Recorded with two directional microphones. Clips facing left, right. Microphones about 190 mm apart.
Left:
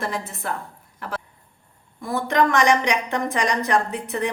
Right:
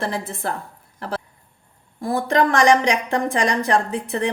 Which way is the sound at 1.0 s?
35° right (ahead or behind).